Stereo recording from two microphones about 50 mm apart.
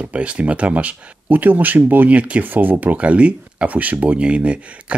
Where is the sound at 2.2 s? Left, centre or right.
Right.